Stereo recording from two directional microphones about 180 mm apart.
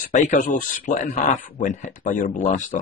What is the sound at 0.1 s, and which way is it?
Speech, 45° left (ahead or behind).